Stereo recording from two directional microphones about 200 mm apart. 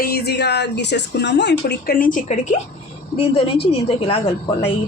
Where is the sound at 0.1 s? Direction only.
55° left (ahead or behind).